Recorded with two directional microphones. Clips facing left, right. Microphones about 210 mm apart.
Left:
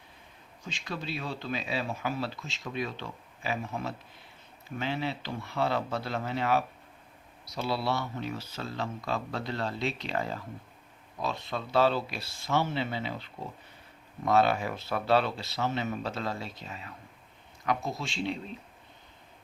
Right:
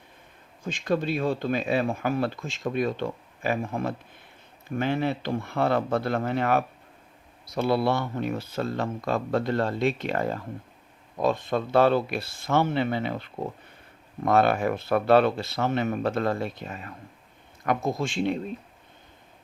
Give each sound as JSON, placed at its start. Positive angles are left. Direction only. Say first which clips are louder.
{"t": 0.6, "sound": "speech", "louder": "right 12 dB", "side_deg": -50}